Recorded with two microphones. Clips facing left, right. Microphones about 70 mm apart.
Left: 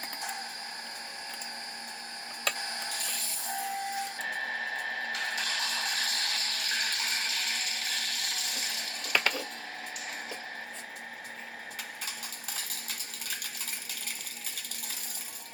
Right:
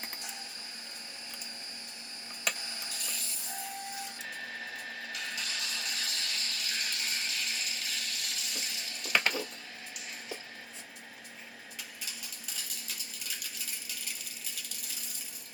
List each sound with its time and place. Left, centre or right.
2.6 s printer: left
12.5 s cutlery: left